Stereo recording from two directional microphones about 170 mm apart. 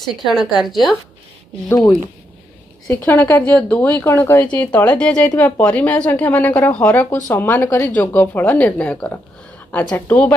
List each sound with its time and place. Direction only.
0.0 s a woman's voice: centre (ahead or behind)
2.9 s a woman's voice: 10° left (ahead or behind)